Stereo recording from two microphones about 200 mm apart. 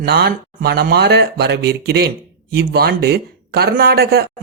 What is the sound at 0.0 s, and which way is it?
Speech, 55° right (ahead or behind).